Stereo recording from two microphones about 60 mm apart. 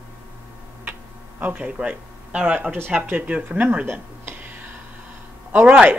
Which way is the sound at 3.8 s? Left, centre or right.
Right.